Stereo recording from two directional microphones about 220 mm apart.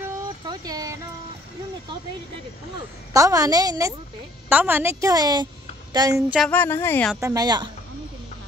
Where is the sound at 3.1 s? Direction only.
15° right (ahead or behind).